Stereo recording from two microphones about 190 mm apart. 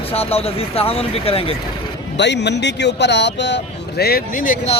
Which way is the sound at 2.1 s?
65° left (ahead or behind).